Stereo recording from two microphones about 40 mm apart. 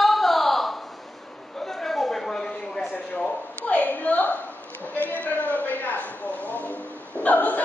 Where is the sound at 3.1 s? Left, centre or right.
Left.